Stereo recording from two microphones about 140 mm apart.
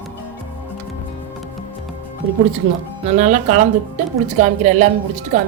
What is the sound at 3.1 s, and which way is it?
A woman's voice, 60° right (ahead or behind).